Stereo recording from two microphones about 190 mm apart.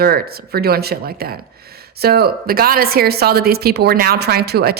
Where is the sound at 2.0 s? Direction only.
55° right (ahead or behind).